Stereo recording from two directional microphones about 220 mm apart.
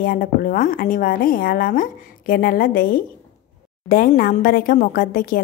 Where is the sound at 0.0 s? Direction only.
40° left (ahead or behind).